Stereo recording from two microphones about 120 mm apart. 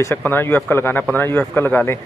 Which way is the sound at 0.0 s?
15° left (ahead or behind).